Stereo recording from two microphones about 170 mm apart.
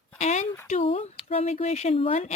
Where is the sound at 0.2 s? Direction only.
40° left (ahead or behind).